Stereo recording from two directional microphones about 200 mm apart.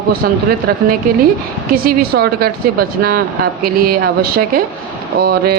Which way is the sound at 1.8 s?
50° right (ahead or behind).